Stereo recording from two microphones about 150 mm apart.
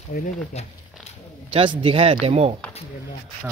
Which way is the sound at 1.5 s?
40° right (ahead or behind).